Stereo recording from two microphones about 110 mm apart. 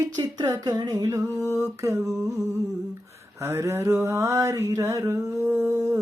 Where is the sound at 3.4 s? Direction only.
25° right (ahead or behind).